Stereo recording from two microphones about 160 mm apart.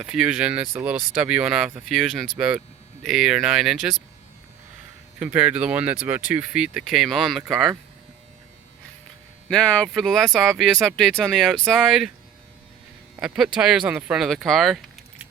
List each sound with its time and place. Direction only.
0.0 s speech: 5° right (ahead or behind)
5.2 s speech: 10° right (ahead or behind)
9.5 s speech: centre (ahead or behind)
13.1 s speech: 5° right (ahead or behind)